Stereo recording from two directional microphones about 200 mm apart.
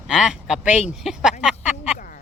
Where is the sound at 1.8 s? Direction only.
40° left (ahead or behind).